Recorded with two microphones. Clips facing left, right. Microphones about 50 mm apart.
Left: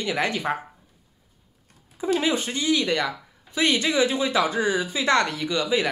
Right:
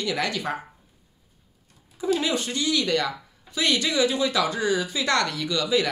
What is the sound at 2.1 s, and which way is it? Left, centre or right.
Speech, left.